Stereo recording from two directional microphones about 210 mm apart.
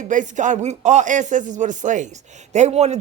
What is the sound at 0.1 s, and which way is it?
A man's voice, 35° right (ahead or behind).